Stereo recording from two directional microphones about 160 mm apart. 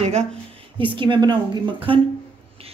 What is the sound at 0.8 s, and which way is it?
A woman's voice, 30° right (ahead or behind).